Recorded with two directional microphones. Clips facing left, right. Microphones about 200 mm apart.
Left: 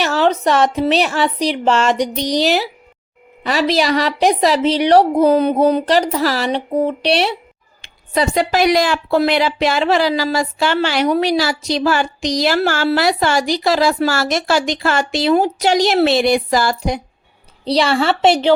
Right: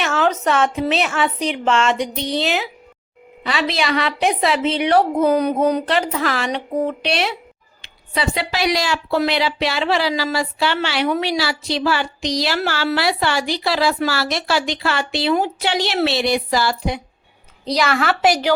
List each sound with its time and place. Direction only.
0.0 s a woman's voice: 35° left (ahead or behind)
7.8 s speech: 45° left (ahead or behind)
17.7 s a woman's voice: 30° left (ahead or behind)